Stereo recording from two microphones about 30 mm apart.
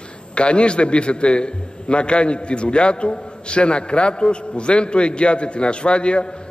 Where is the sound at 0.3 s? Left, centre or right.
Left.